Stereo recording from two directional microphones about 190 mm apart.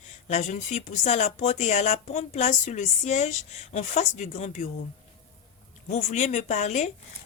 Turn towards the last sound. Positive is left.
turn(degrees=35)  # may be behind; listen again after turning